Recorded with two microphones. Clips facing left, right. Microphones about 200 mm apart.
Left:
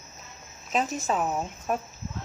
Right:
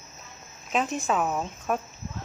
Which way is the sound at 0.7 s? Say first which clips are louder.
Right 1 dB; 40° left (ahead or behind).